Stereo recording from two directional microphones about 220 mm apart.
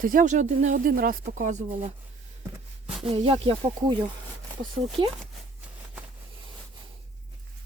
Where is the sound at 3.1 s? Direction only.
25° right (ahead or behind).